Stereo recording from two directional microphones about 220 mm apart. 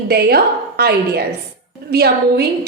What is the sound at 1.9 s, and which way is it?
Speech, 45° right (ahead or behind).